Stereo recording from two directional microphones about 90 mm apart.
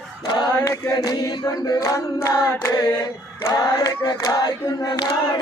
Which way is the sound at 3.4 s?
45° left (ahead or behind).